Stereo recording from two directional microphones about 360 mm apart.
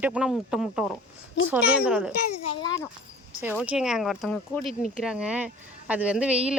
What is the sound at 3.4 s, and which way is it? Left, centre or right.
Speech, centre.